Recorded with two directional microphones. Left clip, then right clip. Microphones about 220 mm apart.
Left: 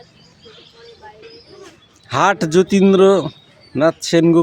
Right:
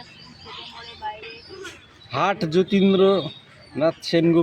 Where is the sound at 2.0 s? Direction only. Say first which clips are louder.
Left 7 dB; 35° left (ahead or behind).